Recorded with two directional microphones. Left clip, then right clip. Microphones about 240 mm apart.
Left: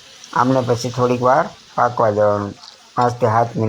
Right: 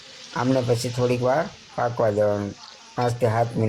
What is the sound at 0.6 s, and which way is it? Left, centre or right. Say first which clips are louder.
Speech: left 5 dB; centre.